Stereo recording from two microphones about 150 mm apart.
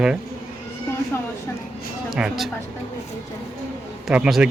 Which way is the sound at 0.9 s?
20° left (ahead or behind).